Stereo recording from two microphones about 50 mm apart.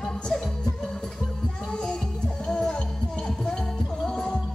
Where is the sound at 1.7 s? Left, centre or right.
Centre.